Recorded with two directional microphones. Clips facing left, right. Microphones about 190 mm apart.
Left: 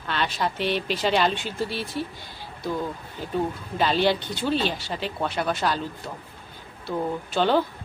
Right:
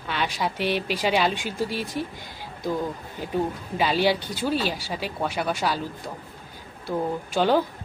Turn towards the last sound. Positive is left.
turn(degrees=-10)  # may be behind; listen again after turning